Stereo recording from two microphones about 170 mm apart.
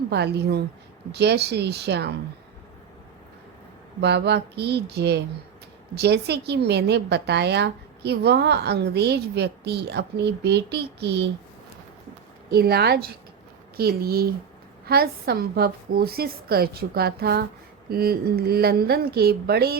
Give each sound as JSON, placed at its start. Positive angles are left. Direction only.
{"t": 0.1, "sound": "a woman's voice", "side_deg": -75}
{"t": 4.0, "sound": "a woman's voice", "side_deg": -80}
{"t": 12.5, "sound": "a woman's voice", "side_deg": -65}